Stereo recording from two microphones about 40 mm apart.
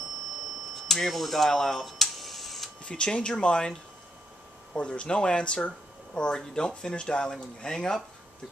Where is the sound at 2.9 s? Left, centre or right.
Left.